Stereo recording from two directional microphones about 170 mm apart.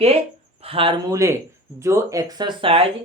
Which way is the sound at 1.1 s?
20° right (ahead or behind).